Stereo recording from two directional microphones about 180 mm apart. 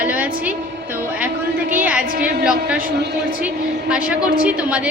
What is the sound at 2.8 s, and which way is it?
Speech, 65° right (ahead or behind).